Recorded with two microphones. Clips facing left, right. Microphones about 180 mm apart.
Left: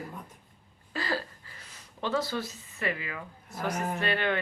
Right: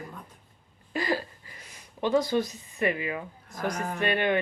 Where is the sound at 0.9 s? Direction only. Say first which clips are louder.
Right 4 dB; 15° right (ahead or behind).